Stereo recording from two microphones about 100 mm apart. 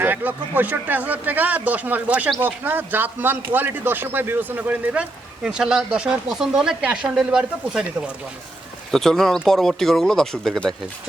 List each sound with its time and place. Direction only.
0.0 s speech: 20° right (ahead or behind)
8.9 s speech: 5° left (ahead or behind)